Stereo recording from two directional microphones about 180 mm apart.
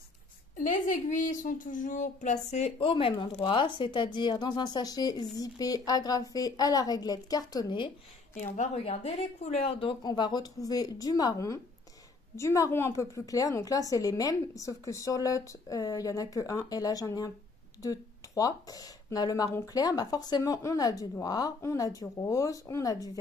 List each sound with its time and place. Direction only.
0.6 s a woman's voice: 45° left (ahead or behind); by 7.9 s 25° left (ahead or behind)
8.4 s a woman's voice: 40° left (ahead or behind); by 23.1 s 20° left (ahead or behind)